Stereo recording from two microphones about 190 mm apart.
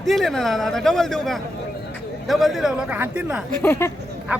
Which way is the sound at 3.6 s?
15° left (ahead or behind).